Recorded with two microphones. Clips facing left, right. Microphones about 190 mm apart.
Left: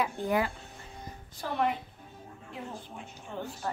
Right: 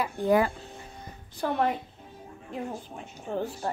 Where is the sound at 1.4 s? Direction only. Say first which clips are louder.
Right 7 dB; 60° right (ahead or behind).